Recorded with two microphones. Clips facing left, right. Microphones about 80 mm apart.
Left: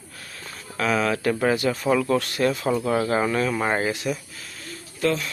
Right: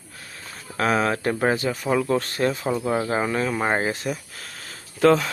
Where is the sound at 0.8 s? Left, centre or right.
Right.